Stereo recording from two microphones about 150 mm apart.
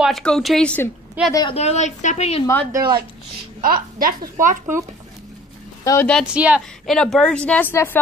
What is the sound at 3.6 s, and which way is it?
Speech, 75° right (ahead or behind).